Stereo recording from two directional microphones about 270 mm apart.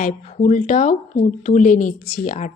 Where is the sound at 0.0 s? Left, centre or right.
Left.